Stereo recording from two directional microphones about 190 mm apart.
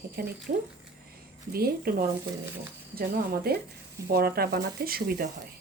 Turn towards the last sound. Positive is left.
turn(degrees=-50)  # may be behind; listen again after turning